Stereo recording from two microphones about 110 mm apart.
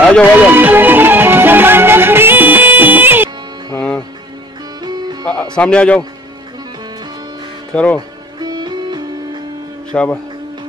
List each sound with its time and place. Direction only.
0.0 s speech: 5° left (ahead or behind)
0.4 s music: 15° right (ahead or behind)
3.7 s music: 10° left (ahead or behind)
5.2 s music: 10° left (ahead or behind)
5.6 s a man's voice: 10° left (ahead or behind)
7.7 s speech: 10° left (ahead or behind)
8.4 s music: 40° right (ahead or behind)
9.9 s a man's voice: 10° left (ahead or behind)